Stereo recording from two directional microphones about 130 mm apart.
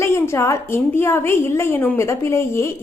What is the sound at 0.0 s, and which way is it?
A woman's voice, 20° left (ahead or behind).